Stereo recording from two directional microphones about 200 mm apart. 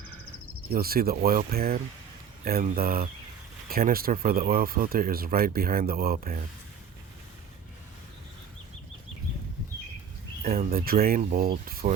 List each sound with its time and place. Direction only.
0.7 s speech: 50° right (ahead or behind)
10.4 s speech: 45° right (ahead or behind)